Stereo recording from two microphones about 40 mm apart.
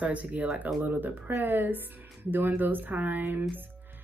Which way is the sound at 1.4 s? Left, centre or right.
Right.